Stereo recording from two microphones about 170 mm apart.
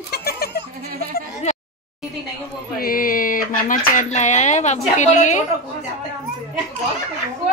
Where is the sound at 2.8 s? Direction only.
55° left (ahead or behind).